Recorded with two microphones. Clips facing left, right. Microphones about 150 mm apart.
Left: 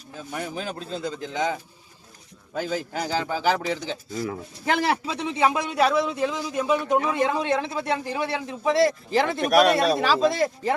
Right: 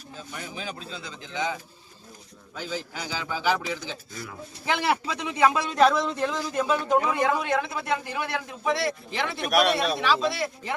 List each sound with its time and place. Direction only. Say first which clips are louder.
0.3 s a man's voice: left 6 dB; 50° left (ahead or behind)
4.3 s a man's voice: left 2 dB; 45° left (ahead or behind); by 5.7 s 20° left (ahead or behind)
5.7 s a man's voice: right 1 dB; 5° left (ahead or behind); by 8.7 s 25° left (ahead or behind)
8.7 s speech: left 8 dB; 40° left (ahead or behind)